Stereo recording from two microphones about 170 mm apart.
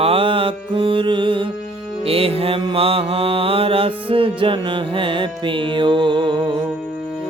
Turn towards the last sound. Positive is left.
turn(degrees=-25)  # may be behind; listen again after turning